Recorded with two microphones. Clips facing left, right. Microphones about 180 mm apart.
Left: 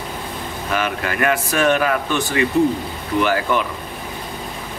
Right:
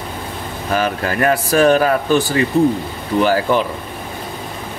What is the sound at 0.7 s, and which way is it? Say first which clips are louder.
Speech: right 4 dB; 35° right (ahead or behind).